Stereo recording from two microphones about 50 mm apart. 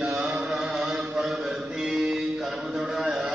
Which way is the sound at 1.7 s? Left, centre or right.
Centre.